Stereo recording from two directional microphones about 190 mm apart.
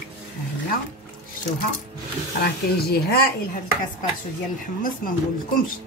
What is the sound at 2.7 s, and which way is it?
Speech, 55° left (ahead or behind).